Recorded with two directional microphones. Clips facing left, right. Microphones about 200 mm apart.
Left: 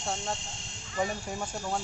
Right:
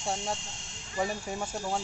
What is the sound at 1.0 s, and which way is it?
Speech, 5° right (ahead or behind).